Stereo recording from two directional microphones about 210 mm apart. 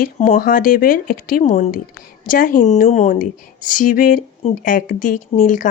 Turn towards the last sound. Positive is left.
turn(degrees=40)  # may be behind; listen again after turning